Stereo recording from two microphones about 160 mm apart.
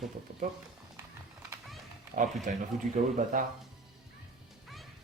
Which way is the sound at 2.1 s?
60° right (ahead or behind).